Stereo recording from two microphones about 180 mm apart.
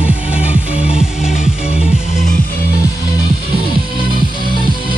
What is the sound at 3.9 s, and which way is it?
Music, 25° right (ahead or behind).